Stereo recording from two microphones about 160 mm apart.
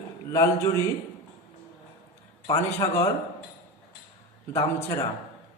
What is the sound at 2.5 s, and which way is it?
Speech, 15° left (ahead or behind).